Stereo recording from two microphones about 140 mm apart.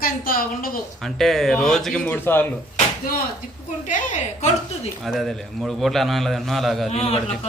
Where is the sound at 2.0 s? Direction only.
15° left (ahead or behind).